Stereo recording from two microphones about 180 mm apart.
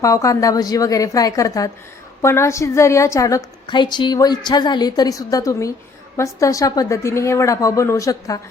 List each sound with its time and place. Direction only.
0.0 s a woman's voice: 20° left (ahead or behind)